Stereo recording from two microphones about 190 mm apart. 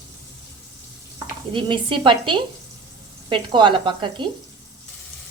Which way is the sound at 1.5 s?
25° right (ahead or behind).